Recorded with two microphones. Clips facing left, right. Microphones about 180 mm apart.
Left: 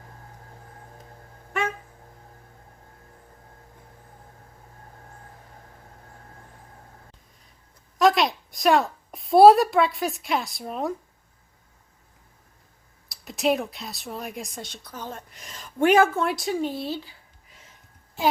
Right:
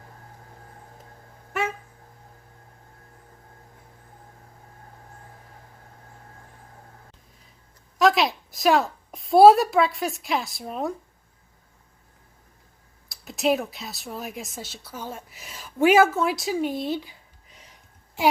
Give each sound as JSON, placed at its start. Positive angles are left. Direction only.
{"t": 7.9, "sound": "a woman's voice", "side_deg": 0}
{"t": 13.1, "sound": "speech", "side_deg": 0}
{"t": 16.6, "sound": "a sound", "side_deg": -15}